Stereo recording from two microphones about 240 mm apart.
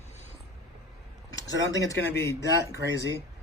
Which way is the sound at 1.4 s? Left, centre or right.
Centre.